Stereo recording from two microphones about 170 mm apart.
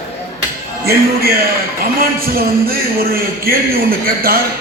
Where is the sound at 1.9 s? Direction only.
60° right (ahead or behind).